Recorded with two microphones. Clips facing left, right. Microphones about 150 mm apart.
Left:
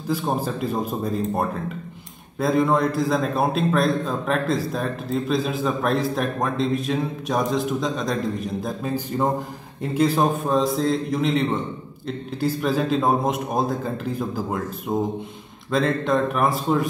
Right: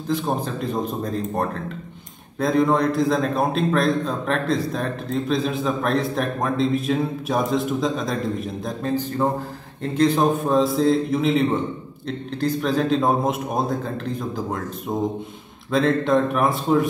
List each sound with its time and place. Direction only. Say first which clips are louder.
0.1 s a man's voice: even; 5° left (ahead or behind)